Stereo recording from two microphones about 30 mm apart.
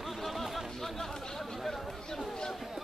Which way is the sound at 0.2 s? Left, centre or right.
Centre.